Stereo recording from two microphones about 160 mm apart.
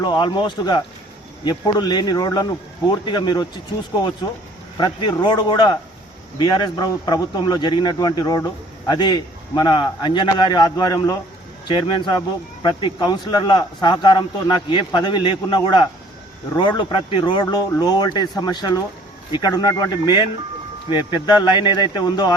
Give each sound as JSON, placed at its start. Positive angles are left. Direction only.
{"t": 0.0, "sound": "speech", "side_deg": 30}
{"t": 4.8, "sound": "speech", "side_deg": 30}